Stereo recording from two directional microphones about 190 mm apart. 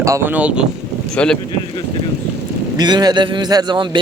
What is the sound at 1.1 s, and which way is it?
Speech, 5° left (ahead or behind).